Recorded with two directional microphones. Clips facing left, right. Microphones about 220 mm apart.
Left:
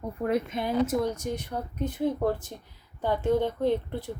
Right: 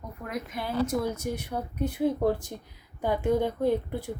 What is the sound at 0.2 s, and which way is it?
Speech, 30° left (ahead or behind).